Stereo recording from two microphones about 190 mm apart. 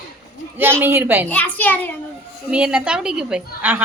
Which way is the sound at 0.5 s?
10° right (ahead or behind).